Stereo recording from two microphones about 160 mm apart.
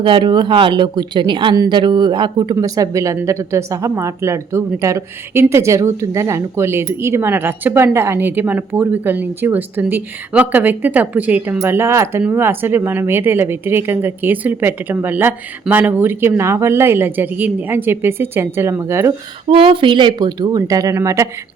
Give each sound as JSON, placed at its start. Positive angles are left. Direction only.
{"t": 0.0, "sound": "speech", "side_deg": -30}
{"t": 19.5, "sound": "speech", "side_deg": -35}